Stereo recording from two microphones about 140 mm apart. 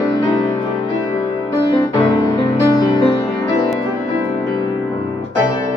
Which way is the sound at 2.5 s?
30° left (ahead or behind).